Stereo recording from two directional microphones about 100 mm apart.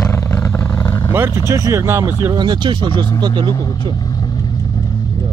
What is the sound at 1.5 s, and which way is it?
Speech, 30° right (ahead or behind).